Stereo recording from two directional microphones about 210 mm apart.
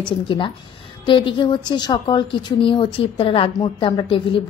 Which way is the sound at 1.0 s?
25° left (ahead or behind).